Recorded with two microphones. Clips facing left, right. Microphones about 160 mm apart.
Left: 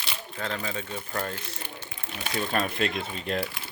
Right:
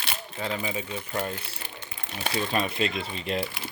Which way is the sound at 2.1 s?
35° right (ahead or behind).